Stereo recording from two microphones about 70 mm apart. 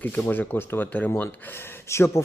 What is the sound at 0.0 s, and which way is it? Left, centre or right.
A man's voice, left.